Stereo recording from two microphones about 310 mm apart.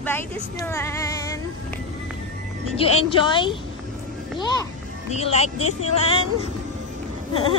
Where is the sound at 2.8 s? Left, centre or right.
Centre.